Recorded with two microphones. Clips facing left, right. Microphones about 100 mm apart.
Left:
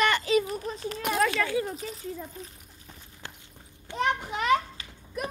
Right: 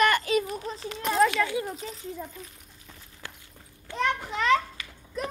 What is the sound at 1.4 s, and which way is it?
Speech, 20° right (ahead or behind).